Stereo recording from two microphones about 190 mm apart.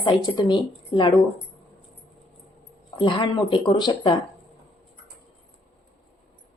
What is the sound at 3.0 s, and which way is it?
Speech, 25° left (ahead or behind).